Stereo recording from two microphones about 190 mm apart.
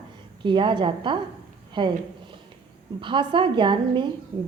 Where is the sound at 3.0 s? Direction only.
25° right (ahead or behind).